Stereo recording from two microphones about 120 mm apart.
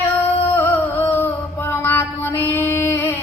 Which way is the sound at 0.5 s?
20° left (ahead or behind).